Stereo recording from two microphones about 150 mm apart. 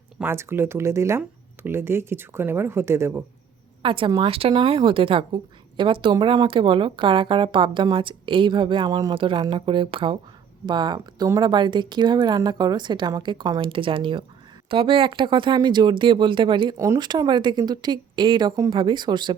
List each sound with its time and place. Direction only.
0.2 s speech: 15° right (ahead or behind)
3.8 s a woman's voice: 35° right (ahead or behind)
16.7 s a woman's voice: 20° right (ahead or behind)